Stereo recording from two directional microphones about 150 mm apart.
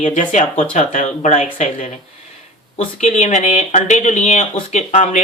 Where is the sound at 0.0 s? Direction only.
50° left (ahead or behind).